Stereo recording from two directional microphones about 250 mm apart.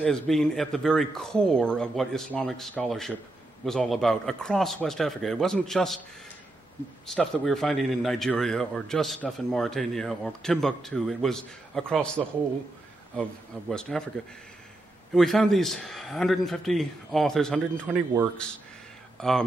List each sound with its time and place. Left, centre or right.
0.0 s a man's voice: centre
7.1 s a man's voice: centre
15.1 s a man's voice: centre
17.8 s speech: centre
19.1 s speech: centre